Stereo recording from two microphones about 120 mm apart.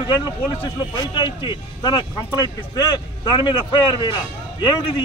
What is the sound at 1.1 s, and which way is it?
Speech, 40° left (ahead or behind).